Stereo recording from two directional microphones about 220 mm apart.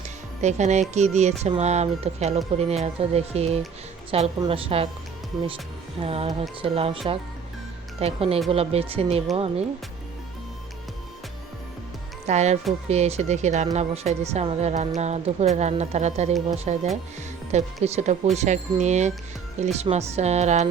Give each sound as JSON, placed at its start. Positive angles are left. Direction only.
{"t": 0.4, "sound": "speech", "side_deg": -30}
{"t": 6.0, "sound": "speech", "side_deg": -25}
{"t": 12.2, "sound": "speech", "side_deg": -30}